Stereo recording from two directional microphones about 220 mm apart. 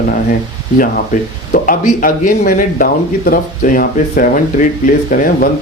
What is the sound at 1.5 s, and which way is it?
Speech, 40° left (ahead or behind).